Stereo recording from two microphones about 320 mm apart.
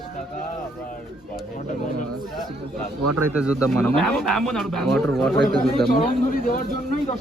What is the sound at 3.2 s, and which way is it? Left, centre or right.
Speech, centre.